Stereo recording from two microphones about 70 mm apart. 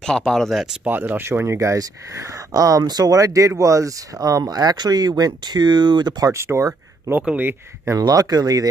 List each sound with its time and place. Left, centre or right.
0.0 s speech: centre
0.5 s speech: centre
0.8 s speech: right
6.3 s speech: right
7.2 s speech: right
8.0 s speech: right